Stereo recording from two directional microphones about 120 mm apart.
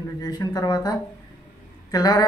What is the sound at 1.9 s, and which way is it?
Speech, 35° left (ahead or behind).